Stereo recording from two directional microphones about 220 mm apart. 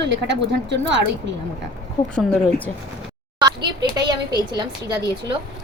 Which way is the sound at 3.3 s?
20° right (ahead or behind).